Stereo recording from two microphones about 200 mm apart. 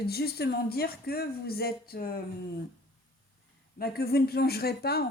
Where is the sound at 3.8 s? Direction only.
50° left (ahead or behind).